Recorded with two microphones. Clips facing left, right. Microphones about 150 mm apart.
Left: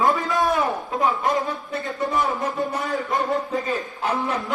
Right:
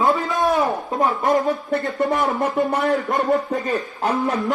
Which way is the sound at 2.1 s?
60° right (ahead or behind).